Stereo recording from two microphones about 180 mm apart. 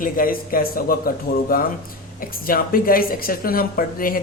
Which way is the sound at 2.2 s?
55° left (ahead or behind).